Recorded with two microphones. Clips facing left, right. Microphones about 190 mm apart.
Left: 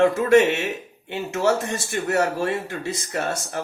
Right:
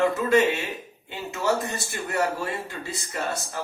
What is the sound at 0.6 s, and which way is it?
Speech, 80° left.